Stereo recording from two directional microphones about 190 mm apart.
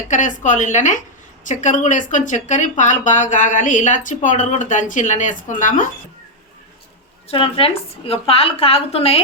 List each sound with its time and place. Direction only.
0.1 s speech: 40° left (ahead or behind)
7.3 s speech: 30° left (ahead or behind)